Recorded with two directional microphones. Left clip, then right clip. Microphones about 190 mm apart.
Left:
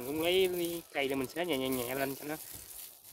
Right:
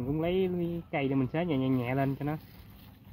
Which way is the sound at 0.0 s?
10° left (ahead or behind).